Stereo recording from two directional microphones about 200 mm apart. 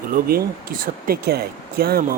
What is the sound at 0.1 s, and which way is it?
Speech, 45° right (ahead or behind).